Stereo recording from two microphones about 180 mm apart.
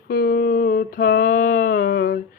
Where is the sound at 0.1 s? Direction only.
60° left (ahead or behind).